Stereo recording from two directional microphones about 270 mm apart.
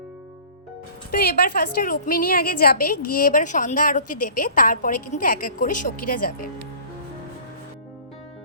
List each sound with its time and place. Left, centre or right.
1.1 s a woman's voice: left